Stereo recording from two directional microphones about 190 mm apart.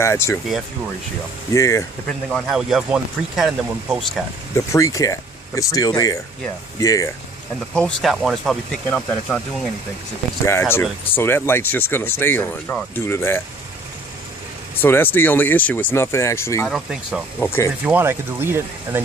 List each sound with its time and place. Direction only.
0.0 s speech: 15° left (ahead or behind)
1.5 s speech: 15° left (ahead or behind)
2.3 s speech: centre (ahead or behind)
4.7 s speech: 15° left (ahead or behind)
7.7 s speech: centre (ahead or behind)
14.8 s speech: 10° left (ahead or behind)
16.6 s speech: centre (ahead or behind)
17.4 s speech: 15° left (ahead or behind)
17.8 s speech: 10° right (ahead or behind)